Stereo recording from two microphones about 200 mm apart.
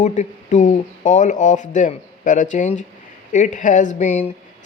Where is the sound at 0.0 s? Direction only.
35° left (ahead or behind).